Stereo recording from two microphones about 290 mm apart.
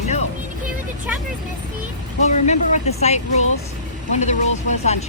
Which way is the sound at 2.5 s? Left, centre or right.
Left.